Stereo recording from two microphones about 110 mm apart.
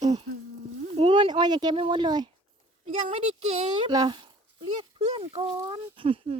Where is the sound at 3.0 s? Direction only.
85° right.